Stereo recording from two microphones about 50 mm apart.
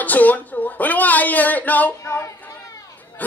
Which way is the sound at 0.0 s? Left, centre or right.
Left.